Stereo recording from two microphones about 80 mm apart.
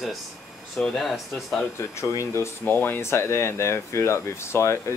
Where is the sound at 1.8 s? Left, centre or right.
Left.